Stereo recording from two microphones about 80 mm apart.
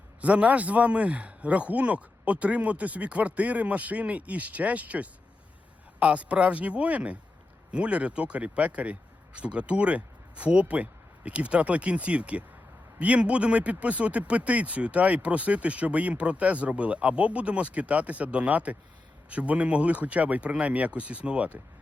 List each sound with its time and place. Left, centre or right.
0.2 s speech: centre